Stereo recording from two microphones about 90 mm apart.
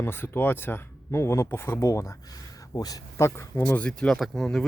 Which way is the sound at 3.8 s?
10° left (ahead or behind).